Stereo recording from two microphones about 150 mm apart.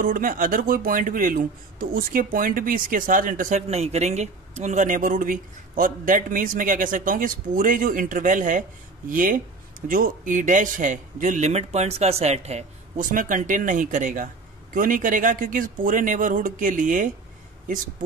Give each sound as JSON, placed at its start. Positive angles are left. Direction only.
{"t": 0.0, "sound": "speech", "side_deg": -65}
{"t": 3.6, "sound": "a man's voice", "side_deg": -45}
{"t": 13.0, "sound": "a man's voice", "side_deg": -65}